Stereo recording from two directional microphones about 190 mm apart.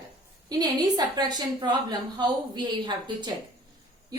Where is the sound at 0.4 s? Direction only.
20° right (ahead or behind).